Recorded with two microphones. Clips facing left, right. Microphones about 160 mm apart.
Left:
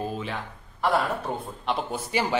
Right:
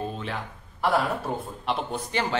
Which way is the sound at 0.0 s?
5° left (ahead or behind).